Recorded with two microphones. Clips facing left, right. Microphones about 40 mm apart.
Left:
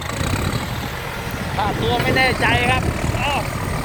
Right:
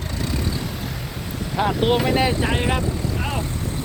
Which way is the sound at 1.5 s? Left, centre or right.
Centre.